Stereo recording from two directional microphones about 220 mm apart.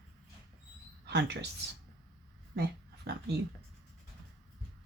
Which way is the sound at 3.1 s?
50° right (ahead or behind).